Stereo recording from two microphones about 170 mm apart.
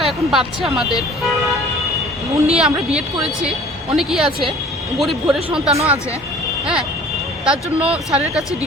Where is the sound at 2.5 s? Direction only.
5° right (ahead or behind).